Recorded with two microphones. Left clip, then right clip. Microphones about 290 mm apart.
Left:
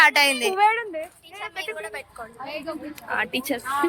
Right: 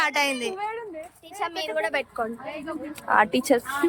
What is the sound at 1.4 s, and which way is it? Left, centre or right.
Speech, right.